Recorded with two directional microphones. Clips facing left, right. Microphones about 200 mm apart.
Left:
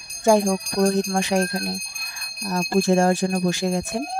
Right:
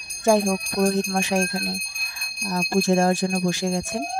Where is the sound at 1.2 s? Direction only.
60° left (ahead or behind).